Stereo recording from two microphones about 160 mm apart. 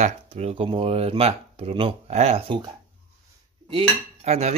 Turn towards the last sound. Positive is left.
turn(degrees=-45)  # may be behind; listen again after turning